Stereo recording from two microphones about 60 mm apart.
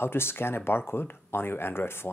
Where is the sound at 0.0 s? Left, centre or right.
Left.